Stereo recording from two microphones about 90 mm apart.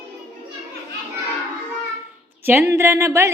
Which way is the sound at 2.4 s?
30° right (ahead or behind).